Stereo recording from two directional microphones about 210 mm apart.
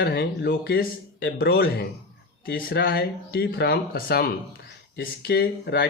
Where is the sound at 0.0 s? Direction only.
50° left (ahead or behind).